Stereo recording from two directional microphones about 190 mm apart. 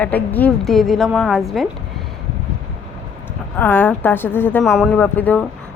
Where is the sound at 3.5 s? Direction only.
10° left (ahead or behind).